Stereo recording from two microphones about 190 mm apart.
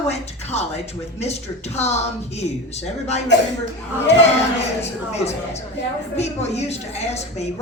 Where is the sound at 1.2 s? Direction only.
35° left (ahead or behind).